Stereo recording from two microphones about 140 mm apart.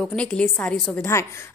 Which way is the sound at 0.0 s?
10° left (ahead or behind).